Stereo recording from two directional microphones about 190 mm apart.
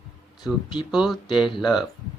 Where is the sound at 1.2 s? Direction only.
25° left (ahead or behind).